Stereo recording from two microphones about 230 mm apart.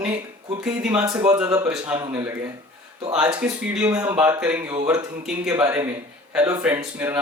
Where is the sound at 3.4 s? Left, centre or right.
Centre.